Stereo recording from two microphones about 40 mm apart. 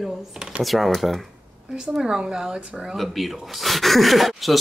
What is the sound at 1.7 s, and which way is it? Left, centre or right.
Speech, centre.